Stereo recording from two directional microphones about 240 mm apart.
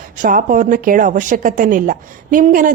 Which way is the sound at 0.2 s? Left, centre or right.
Right.